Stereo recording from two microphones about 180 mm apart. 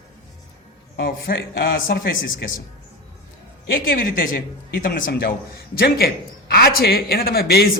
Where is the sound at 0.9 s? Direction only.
60° left (ahead or behind).